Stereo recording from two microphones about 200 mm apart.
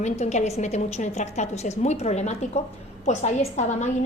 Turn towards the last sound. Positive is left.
turn(degrees=35)  # may be behind; listen again after turning